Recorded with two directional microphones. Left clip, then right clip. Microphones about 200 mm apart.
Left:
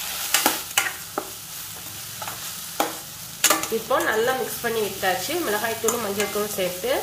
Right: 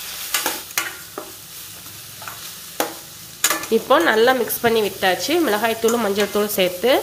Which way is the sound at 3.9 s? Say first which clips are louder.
Right 7 dB; 55° right (ahead or behind).